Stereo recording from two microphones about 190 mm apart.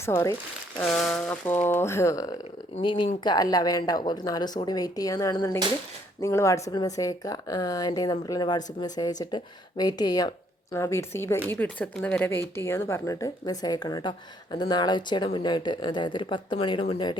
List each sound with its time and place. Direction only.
0.0 s speech: 15° left (ahead or behind)
0.8 s speech: centre (ahead or behind); by 17.2 s 25° left (ahead or behind)